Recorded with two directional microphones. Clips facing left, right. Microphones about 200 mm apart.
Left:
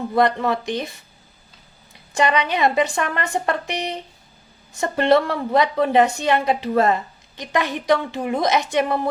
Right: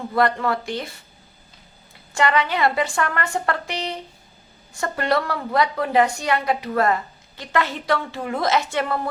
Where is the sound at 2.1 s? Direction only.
20° left (ahead or behind).